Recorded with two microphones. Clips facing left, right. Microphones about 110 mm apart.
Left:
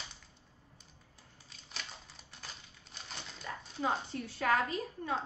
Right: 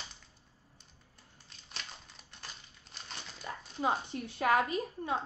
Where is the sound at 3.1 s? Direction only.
Centre (ahead or behind).